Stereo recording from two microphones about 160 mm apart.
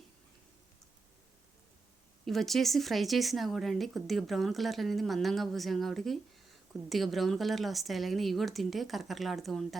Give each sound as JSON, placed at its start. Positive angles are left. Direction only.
{"t": 2.2, "sound": "speech", "side_deg": 0}